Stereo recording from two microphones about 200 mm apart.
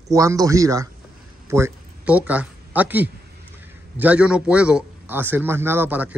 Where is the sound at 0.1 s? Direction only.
15° right (ahead or behind).